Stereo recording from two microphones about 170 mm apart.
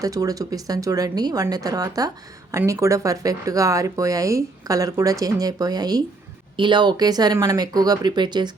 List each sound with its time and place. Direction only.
0.0 s speech: 20° right (ahead or behind)